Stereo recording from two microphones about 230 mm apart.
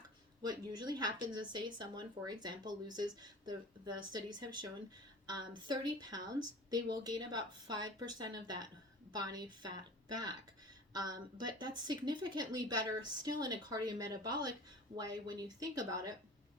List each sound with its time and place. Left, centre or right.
0.4 s a woman's voice: centre